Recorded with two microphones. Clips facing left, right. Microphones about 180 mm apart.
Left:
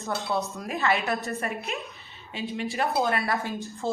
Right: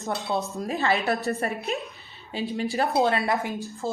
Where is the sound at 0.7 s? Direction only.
35° right (ahead or behind).